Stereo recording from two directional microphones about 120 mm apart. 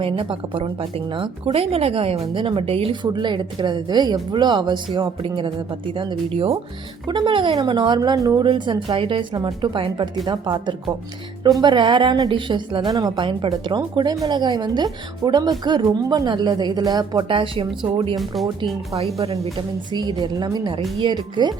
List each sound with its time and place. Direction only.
0.0 s a woman's voice: 50° right (ahead or behind); by 8.4 s 30° right (ahead or behind)
8.4 s a woman's voice: 40° right (ahead or behind)
19.5 s a woman's voice: 40° right (ahead or behind)